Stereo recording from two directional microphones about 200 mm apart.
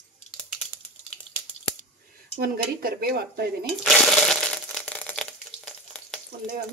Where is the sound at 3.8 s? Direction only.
Centre (ahead or behind).